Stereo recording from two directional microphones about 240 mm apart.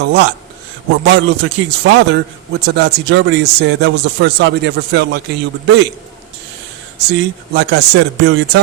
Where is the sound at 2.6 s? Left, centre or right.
Right.